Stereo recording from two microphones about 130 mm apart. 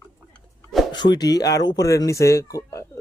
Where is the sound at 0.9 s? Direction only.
35° left (ahead or behind).